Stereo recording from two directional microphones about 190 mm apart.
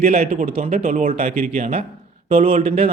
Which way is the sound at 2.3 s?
30° right (ahead or behind).